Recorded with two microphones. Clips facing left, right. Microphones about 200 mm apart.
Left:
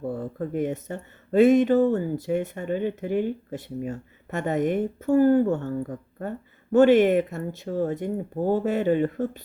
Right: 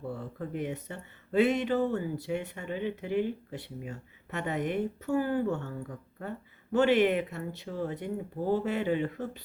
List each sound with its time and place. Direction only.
0.1 s speech: 45° left (ahead or behind)